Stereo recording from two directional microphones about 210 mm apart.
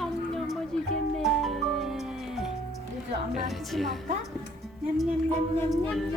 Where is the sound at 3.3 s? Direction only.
Centre (ahead or behind).